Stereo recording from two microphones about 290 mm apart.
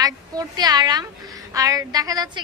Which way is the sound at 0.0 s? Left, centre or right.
Centre.